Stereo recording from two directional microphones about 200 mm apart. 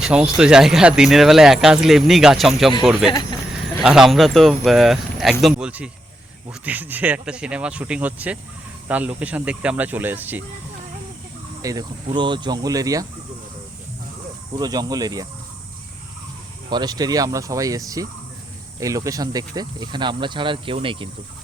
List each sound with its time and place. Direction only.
0.0 s speech: 5° right (ahead or behind)
11.6 s speech: 20° right (ahead or behind)
14.6 s speech: 20° right (ahead or behind)
16.6 s speech: 20° right (ahead or behind)